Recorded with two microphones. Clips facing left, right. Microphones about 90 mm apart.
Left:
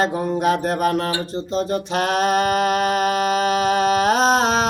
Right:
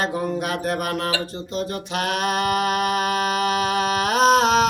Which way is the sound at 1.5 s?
30° left (ahead or behind).